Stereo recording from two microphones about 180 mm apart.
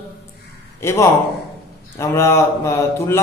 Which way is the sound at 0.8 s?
15° left (ahead or behind).